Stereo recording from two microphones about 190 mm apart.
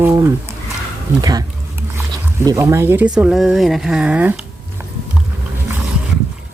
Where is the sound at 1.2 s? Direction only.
20° right (ahead or behind).